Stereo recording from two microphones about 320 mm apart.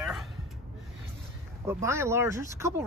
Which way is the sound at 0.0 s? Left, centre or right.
Centre.